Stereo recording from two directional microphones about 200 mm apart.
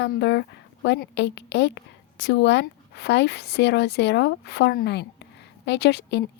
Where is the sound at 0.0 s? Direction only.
60° left (ahead or behind).